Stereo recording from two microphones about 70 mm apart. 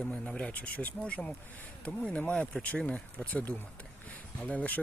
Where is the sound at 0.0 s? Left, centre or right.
Centre.